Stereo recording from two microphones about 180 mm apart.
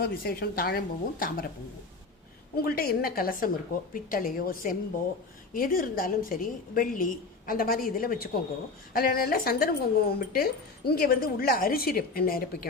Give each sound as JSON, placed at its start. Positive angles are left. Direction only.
{"t": 0.0, "sound": "a woman's voice", "side_deg": 60}
{"t": 2.6, "sound": "a woman's voice", "side_deg": 60}